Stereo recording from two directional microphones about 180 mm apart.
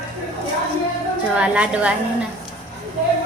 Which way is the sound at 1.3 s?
5° right (ahead or behind).